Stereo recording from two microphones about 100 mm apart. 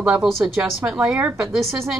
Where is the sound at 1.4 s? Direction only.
5° right (ahead or behind).